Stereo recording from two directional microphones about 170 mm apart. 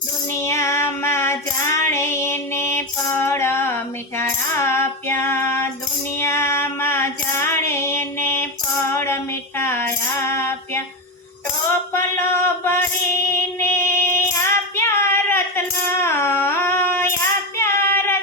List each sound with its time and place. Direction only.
0.3 s female singing: 15° left (ahead or behind)
4.2 s music: 15° left (ahead or behind)
6.1 s female singing: 15° left (ahead or behind)
9.6 s music: 15° left (ahead or behind)
11.9 s a sound: 15° left (ahead or behind)
13.2 s child singing: 15° left (ahead or behind)
17.6 s singing: 15° left (ahead or behind)